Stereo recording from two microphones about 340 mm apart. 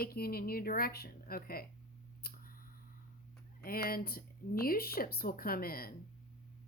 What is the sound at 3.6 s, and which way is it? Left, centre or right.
Speech, left.